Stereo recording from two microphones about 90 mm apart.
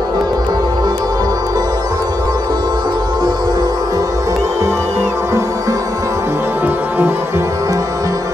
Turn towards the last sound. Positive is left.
turn(degrees=-20)  # may be behind; listen again after turning